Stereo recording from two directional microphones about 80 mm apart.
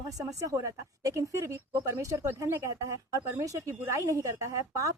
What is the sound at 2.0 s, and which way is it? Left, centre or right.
A woman's voice, right.